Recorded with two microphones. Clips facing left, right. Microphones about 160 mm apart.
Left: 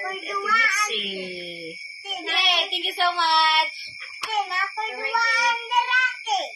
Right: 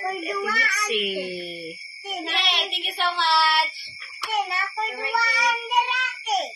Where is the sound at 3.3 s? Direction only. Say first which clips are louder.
Even; 15° left (ahead or behind).